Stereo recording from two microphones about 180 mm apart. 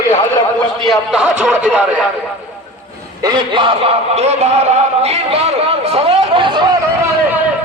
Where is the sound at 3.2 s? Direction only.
25° right (ahead or behind).